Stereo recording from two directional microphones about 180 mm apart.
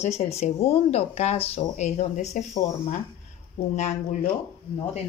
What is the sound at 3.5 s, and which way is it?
Speech, 40° left (ahead or behind).